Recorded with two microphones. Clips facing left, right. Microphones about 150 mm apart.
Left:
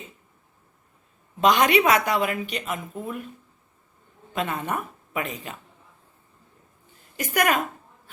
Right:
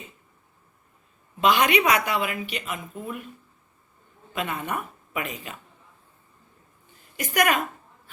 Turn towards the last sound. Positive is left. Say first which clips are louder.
# even
turn(degrees=40)  # may be behind; listen again after turning